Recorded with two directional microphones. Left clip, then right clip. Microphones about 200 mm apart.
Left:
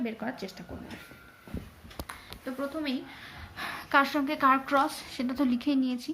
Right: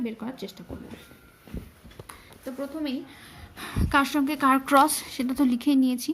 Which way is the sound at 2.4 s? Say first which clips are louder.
Right 2 dB; 25° right (ahead or behind).